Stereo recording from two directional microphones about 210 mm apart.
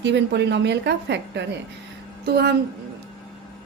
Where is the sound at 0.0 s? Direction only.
55° right (ahead or behind).